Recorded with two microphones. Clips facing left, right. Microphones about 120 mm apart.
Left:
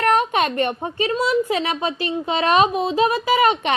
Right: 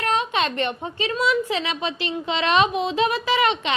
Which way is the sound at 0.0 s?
50° left (ahead or behind).